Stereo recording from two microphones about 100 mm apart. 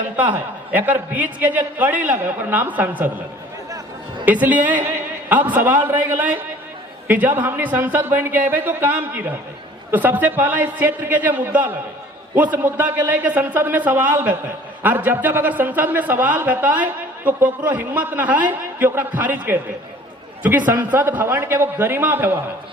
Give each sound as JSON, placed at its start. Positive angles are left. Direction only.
{"t": 0.2, "sound": "a man's voice", "side_deg": -15}
{"t": 4.3, "sound": "a man's voice", "side_deg": -15}